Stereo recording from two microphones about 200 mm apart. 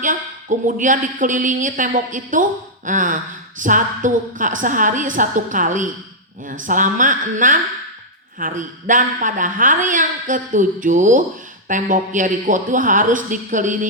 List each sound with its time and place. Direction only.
0.0 s speech: 40° right (ahead or behind)